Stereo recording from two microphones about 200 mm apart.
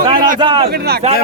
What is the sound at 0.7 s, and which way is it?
Speech, 50° right (ahead or behind).